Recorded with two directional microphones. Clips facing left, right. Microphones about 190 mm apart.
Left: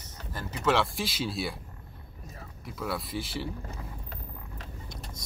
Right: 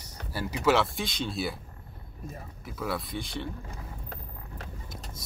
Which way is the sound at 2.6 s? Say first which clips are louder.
Right 1 dB; centre (ahead or behind).